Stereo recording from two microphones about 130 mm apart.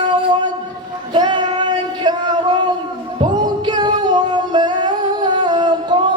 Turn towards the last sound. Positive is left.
turn(degrees=-35)  # may be behind; listen again after turning